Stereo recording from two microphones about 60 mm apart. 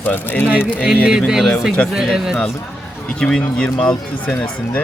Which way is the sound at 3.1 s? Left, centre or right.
Centre.